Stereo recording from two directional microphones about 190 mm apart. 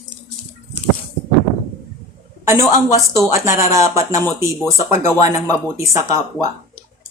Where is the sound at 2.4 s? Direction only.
15° right (ahead or behind).